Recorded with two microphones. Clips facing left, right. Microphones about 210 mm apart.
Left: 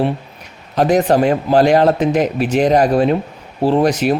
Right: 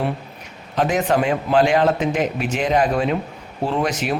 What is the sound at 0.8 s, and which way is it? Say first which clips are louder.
Speech: left 6 dB; 40° left (ahead or behind).